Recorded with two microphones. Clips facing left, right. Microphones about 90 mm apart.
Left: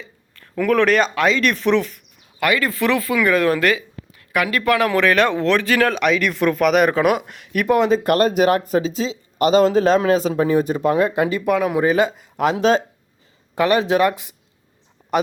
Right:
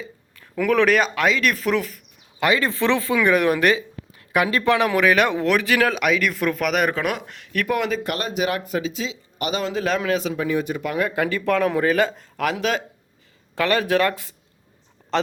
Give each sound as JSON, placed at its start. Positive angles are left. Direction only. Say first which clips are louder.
{"t": 0.5, "sound": "speech", "louder": "left 2 dB", "side_deg": 0}
{"t": 2.4, "sound": "speech", "louder": "left 1 dB", "side_deg": -25}
{"t": 7.7, "sound": "speech", "louder": "left 8 dB", "side_deg": 30}
{"t": 8.0, "sound": "speech", "louder": "left 9 dB", "side_deg": 45}